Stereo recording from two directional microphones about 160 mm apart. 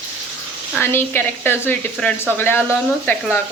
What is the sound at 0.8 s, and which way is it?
A woman's voice, 15° left (ahead or behind).